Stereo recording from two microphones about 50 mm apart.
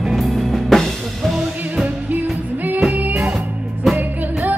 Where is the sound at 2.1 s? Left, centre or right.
Right.